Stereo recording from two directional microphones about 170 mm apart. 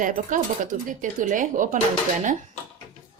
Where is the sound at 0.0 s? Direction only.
50° right (ahead or behind).